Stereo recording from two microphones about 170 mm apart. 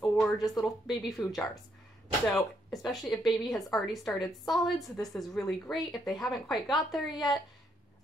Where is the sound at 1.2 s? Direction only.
20° left (ahead or behind).